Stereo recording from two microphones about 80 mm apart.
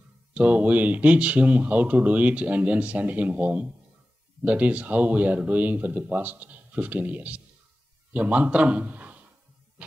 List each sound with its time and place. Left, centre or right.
0.3 s a man's voice: centre